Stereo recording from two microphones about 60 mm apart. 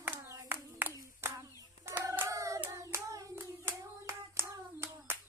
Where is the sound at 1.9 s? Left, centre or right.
Right.